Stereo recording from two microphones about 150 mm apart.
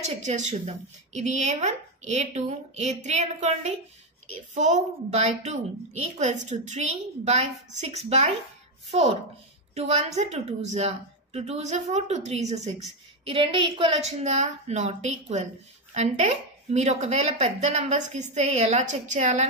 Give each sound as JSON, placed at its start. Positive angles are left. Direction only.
{"t": 0.0, "sound": "speech", "side_deg": -50}
{"t": 9.8, "sound": "speech", "side_deg": -50}
{"t": 13.2, "sound": "speech", "side_deg": -35}